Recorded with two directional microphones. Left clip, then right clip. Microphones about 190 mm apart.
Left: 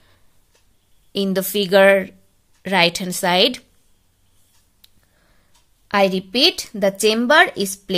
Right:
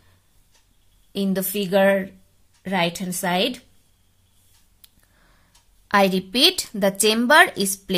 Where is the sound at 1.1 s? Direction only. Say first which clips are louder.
Left 5 dB; 30° left (ahead or behind).